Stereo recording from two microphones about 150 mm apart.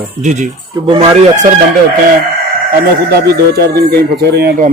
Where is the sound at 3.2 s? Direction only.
90° right.